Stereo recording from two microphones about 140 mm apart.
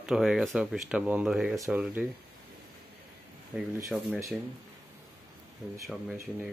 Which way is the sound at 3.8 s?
Centre (ahead or behind).